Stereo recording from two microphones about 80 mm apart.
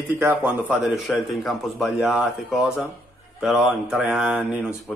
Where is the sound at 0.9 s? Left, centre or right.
Centre.